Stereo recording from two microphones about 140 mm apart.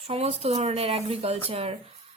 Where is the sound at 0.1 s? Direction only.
45° right (ahead or behind).